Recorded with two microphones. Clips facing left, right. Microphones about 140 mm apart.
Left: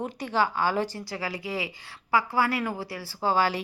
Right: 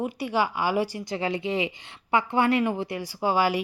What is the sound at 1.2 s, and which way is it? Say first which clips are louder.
A woman's voice: right 6 dB; 25° right (ahead or behind).